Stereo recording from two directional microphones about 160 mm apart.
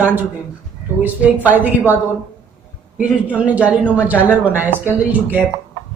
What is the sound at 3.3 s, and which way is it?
A woman's voice, 10° right (ahead or behind).